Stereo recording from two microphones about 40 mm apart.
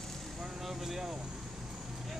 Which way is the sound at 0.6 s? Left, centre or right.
Centre.